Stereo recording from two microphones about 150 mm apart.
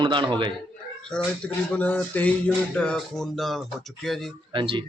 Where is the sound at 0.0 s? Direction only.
30° right (ahead or behind).